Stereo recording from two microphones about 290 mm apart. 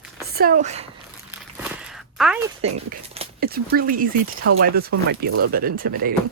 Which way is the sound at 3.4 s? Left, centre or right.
Right.